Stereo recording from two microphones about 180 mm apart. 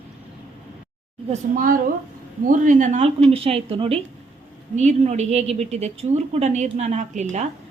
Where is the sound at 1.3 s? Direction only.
50° right (ahead or behind).